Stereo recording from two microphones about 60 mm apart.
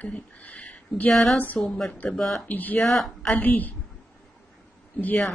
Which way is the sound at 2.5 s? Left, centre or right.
Left.